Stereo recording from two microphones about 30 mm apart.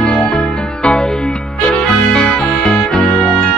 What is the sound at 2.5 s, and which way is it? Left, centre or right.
Music, left.